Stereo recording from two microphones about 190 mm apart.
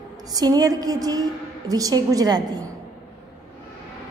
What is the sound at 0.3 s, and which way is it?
A woman's voice, 20° right (ahead or behind).